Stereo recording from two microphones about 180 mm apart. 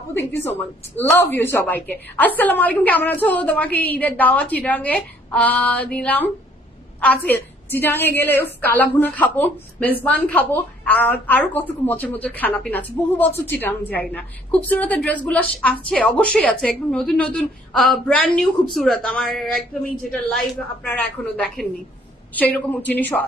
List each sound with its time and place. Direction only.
0.1 s a woman's voice: 10° left (ahead or behind)
20.8 s a woman's voice: 10° left (ahead or behind)